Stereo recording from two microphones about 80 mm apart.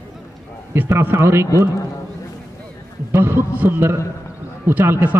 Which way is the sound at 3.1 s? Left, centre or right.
Right.